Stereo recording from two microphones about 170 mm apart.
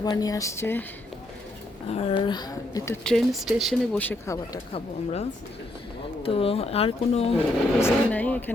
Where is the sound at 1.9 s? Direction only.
30° left (ahead or behind).